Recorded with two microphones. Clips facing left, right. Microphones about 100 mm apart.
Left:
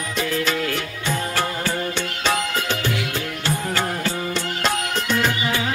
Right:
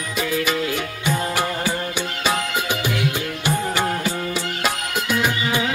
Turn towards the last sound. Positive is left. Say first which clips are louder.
# even
turn(degrees=-10)  # may be behind; listen again after turning